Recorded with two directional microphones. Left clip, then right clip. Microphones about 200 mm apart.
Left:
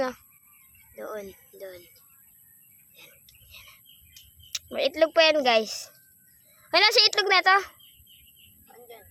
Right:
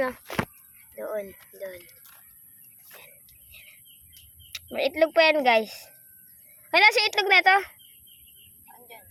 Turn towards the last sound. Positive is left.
turn(degrees=5)  # may be behind; listen again after turning